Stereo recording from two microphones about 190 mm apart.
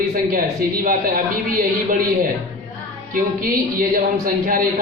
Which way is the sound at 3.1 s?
50° right (ahead or behind).